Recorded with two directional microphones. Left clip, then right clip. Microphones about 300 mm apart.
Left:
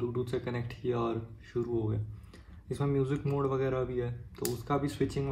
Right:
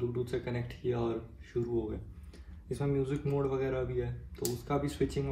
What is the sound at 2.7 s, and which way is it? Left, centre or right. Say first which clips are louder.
A man's voice: left 2 dB; centre.